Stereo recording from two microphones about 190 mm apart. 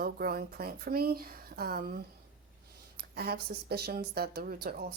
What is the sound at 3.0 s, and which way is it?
Speech, 55° right (ahead or behind).